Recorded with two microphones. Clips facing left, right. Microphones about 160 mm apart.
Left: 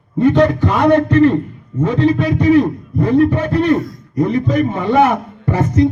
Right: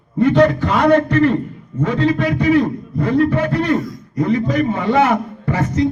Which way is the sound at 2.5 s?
20° left (ahead or behind).